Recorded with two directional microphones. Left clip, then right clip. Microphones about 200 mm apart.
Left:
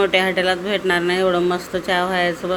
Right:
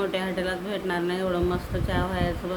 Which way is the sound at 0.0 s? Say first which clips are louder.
Left 11 dB; 15° left (ahead or behind).